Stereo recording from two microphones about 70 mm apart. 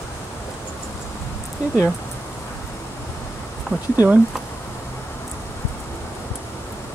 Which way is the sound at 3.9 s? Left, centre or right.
Right.